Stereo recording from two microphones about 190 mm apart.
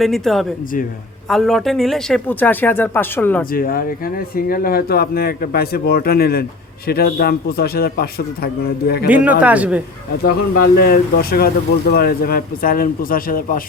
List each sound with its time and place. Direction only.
0.0 s speech: centre (ahead or behind)
3.5 s speech: 50° left (ahead or behind)
9.0 s a man's voice: 5° right (ahead or behind)
10.2 s speech: 55° left (ahead or behind)